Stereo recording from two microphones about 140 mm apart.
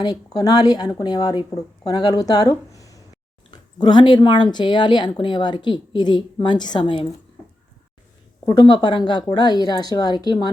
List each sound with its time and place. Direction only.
0.0 s speech: 30° left (ahead or behind)
8.4 s speech: 35° left (ahead or behind)